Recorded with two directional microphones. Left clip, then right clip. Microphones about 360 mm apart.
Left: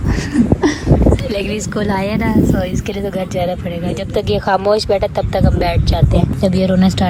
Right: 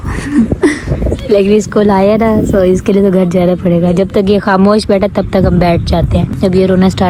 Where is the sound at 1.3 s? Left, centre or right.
Centre.